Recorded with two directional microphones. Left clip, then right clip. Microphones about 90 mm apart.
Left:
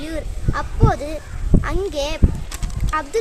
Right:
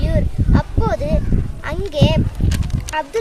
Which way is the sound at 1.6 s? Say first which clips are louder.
Right 5 dB; 25° left (ahead or behind).